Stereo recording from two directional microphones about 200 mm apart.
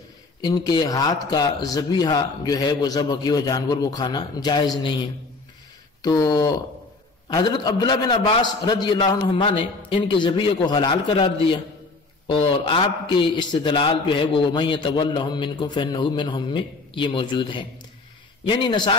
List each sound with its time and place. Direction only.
0.4 s a man's voice: 20° left (ahead or behind)
6.0 s a man's voice: 20° left (ahead or behind)